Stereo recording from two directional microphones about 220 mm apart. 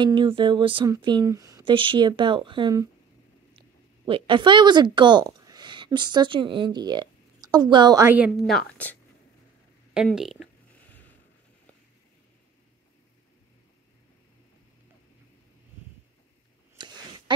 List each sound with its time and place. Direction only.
0.0 s speech: 20° right (ahead or behind); by 8.9 s 5° left (ahead or behind)
9.9 s speech: centre (ahead or behind)
16.7 s a sound: 20° right (ahead or behind)